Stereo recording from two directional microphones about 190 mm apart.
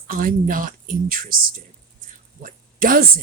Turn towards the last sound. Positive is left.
turn(degrees=-50)  # may be behind; listen again after turning